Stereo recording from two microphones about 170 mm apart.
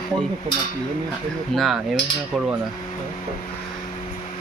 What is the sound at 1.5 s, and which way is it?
Speech, centre (ahead or behind).